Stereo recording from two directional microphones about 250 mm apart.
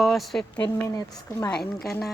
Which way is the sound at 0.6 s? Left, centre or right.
Centre.